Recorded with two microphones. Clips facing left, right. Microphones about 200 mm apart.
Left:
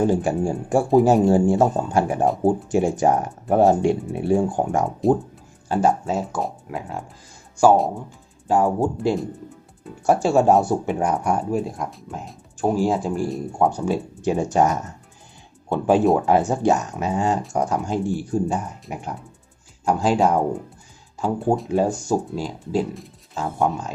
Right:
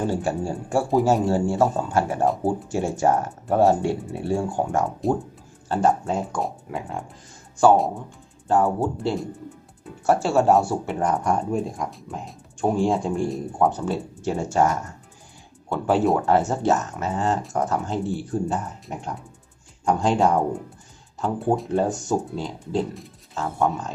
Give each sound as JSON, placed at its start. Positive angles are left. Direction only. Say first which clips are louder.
{"t": 0.1, "sound": "speech", "louder": "left 4 dB", "side_deg": 15}
{"t": 10.9, "sound": "speech", "louder": "left 1 dB", "side_deg": 10}
{"t": 13.7, "sound": "speech", "louder": "left 2 dB", "side_deg": 10}